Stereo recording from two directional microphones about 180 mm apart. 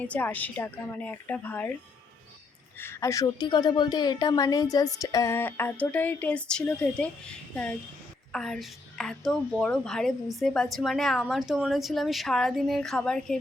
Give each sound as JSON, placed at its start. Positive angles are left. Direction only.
{"t": 0.0, "sound": "a woman's voice", "side_deg": 10}
{"t": 2.7, "sound": "a woman's voice", "side_deg": 15}